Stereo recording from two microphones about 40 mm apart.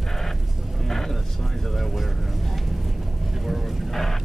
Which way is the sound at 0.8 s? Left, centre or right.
Centre.